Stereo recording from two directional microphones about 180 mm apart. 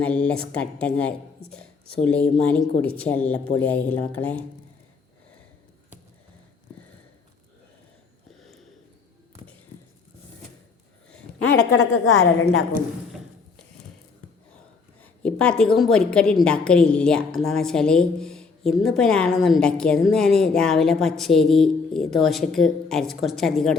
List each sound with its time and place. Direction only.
0.0 s speech: 5° left (ahead or behind)
8.4 s a sound: centre (ahead or behind)
11.5 s a woman's voice: 75° left (ahead or behind)
15.0 s a woman's voice: 5° left (ahead or behind)